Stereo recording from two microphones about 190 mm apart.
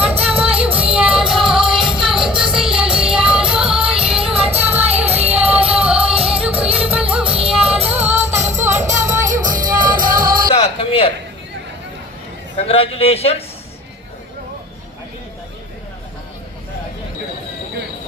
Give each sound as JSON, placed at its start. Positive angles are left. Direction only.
{"t": 0.2, "sound": "music", "side_deg": -10}
{"t": 2.6, "sound": "music", "side_deg": -30}
{"t": 2.9, "sound": "music", "side_deg": -5}
{"t": 3.8, "sound": "music", "side_deg": -30}
{"t": 4.5, "sound": "music", "side_deg": -10}
{"t": 5.2, "sound": "music", "side_deg": -30}
{"t": 5.7, "sound": "music", "side_deg": -5}
{"t": 6.0, "sound": "music", "side_deg": -30}
{"t": 6.3, "sound": "music", "side_deg": -5}
{"t": 7.6, "sound": "music", "side_deg": -30}
{"t": 8.0, "sound": "music", "side_deg": -10}
{"t": 9.7, "sound": "music", "side_deg": -45}
{"t": 10.5, "sound": "a sound", "side_deg": 30}
{"t": 12.5, "sound": "a sound", "side_deg": 30}